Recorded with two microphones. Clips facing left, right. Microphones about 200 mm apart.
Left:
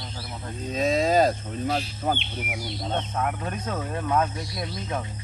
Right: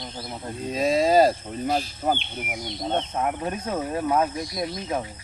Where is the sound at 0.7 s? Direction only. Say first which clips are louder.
Right 2 dB; centre (ahead or behind).